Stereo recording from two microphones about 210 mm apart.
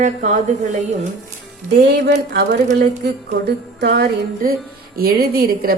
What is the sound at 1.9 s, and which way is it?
Speech, 50° right (ahead or behind).